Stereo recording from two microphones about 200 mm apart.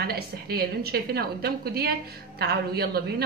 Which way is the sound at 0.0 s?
50° right (ahead or behind).